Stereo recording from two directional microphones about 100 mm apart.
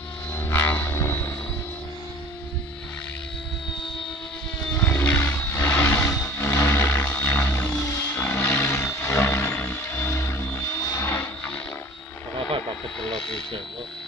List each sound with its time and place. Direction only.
0.4 s music: 25° left (ahead or behind)
4.8 s vehicle: 20° left (ahead or behind)
6.0 s music: 30° left (ahead or behind)
7.7 s vehicle: 35° left (ahead or behind)